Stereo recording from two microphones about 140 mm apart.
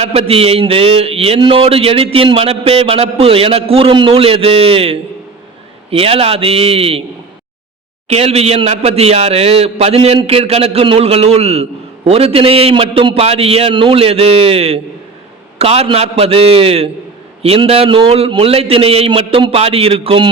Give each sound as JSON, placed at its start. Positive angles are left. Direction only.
{"t": 0.0, "sound": "a man's voice", "side_deg": -45}
{"t": 8.0, "sound": "a man's voice", "side_deg": -50}